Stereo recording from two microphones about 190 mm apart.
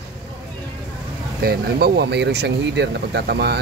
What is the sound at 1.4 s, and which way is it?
Speech, 55° right (ahead or behind).